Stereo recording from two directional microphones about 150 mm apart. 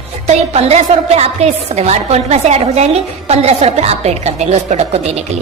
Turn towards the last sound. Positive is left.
turn(degrees=-45)  # may be behind; listen again after turning